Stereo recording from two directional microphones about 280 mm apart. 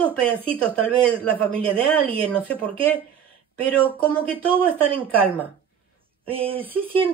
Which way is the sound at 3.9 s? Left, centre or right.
Centre.